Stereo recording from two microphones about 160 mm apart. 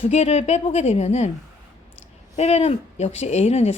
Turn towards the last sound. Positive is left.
turn(degrees=40)  # may be behind; listen again after turning